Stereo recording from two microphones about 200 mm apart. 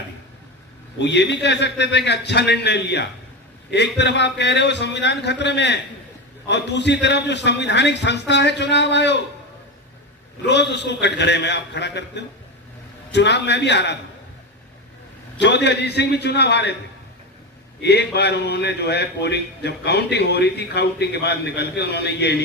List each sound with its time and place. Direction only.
0.9 s a man's voice: 60° left (ahead or behind)
10.4 s a man's voice: 60° left (ahead or behind)
15.4 s a man's voice: 60° left (ahead or behind)
17.8 s a man's voice: 55° left (ahead or behind)